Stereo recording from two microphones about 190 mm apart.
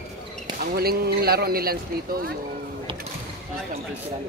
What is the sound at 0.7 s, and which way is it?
Speech, 55° right (ahead or behind).